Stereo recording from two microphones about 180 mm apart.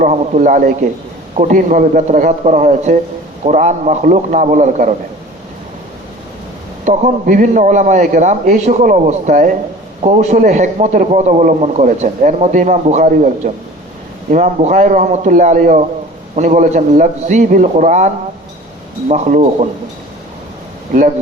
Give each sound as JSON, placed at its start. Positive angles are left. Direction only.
{"t": 0.0, "sound": "a man's voice", "side_deg": -45}
{"t": 6.8, "sound": "a man's voice", "side_deg": -45}
{"t": 20.9, "sound": "a man's voice", "side_deg": -50}